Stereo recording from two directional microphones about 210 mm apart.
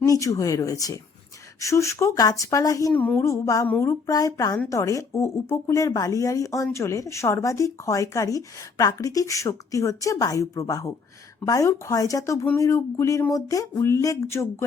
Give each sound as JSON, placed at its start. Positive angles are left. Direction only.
{"t": 0.0, "sound": "speech", "side_deg": 15}